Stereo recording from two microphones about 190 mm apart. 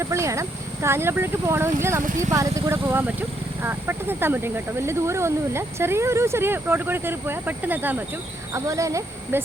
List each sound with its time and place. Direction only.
0.0 s speech: 15° right (ahead or behind)